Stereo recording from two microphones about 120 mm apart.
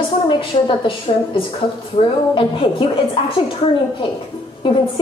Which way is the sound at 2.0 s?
55° left (ahead or behind).